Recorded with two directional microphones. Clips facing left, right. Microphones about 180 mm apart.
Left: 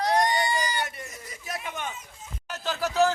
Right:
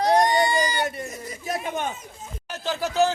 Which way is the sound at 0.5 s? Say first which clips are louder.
Right 5 dB; 30° right (ahead or behind).